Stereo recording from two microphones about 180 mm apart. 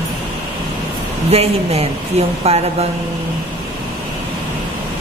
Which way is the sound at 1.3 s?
35° right (ahead or behind).